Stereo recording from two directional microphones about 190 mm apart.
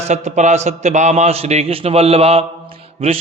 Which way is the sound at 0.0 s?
35° right (ahead or behind).